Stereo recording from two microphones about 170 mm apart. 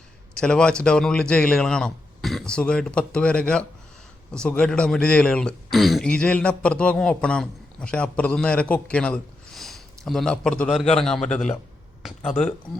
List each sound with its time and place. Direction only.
0.3 s speech: 5° left (ahead or behind)